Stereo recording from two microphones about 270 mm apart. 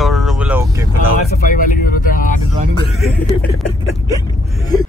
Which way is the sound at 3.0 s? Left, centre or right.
Centre.